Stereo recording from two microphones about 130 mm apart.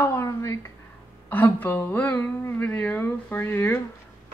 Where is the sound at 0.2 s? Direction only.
20° left (ahead or behind).